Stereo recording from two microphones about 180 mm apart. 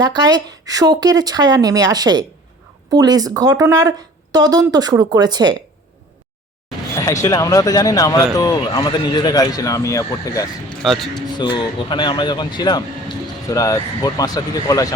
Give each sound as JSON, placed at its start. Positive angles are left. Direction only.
{"t": 0.0, "sound": "speech", "side_deg": -20}
{"t": 6.9, "sound": "a man's voice", "side_deg": 15}
{"t": 10.7, "sound": "a man's voice", "side_deg": 0}
{"t": 11.3, "sound": "a man's voice", "side_deg": 25}